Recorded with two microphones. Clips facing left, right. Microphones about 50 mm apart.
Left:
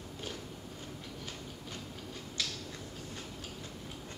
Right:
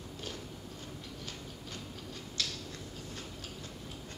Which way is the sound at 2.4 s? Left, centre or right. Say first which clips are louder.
Even; centre.